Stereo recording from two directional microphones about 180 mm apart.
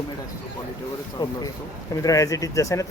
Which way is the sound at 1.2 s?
25° left (ahead or behind).